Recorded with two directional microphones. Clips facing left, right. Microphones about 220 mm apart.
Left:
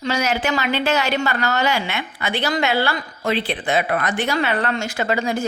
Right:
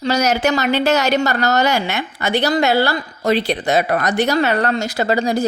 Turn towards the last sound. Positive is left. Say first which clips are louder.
# right 4 dB
turn(degrees=-35)  # may be behind; listen again after turning